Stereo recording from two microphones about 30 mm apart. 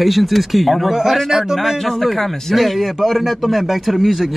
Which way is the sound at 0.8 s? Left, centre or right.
Centre.